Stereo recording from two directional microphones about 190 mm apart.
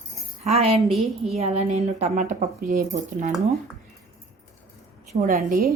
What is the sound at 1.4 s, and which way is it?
Speech, 35° right (ahead or behind).